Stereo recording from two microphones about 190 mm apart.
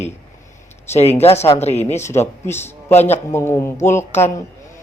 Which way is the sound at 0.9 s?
35° left (ahead or behind).